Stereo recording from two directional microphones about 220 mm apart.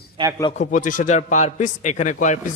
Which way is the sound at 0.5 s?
35° left (ahead or behind).